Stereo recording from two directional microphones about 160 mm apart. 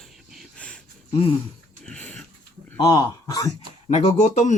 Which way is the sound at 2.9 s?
25° left (ahead or behind).